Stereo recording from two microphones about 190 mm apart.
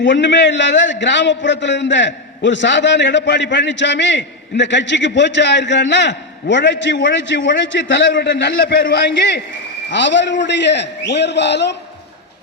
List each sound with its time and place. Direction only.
0.0 s a man's voice: 70° left (ahead or behind)